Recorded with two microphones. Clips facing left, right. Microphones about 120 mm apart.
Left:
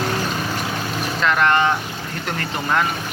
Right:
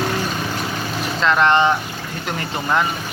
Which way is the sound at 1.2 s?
25° right (ahead or behind).